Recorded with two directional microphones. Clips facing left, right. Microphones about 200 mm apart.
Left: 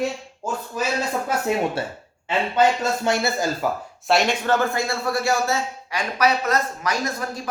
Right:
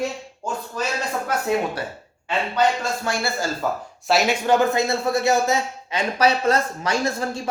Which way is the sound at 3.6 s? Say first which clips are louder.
Right 2 dB; 10° left (ahead or behind).